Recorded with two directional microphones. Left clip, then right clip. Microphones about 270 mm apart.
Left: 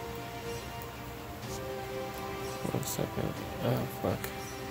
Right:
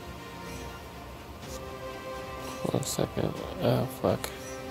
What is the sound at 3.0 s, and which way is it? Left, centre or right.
Speech, right.